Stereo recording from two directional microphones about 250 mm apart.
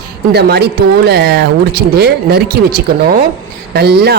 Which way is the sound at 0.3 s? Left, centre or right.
Right.